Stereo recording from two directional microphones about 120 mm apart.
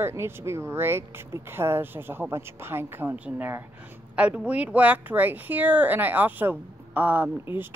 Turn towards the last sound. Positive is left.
turn(degrees=-15)  # may be behind; listen again after turning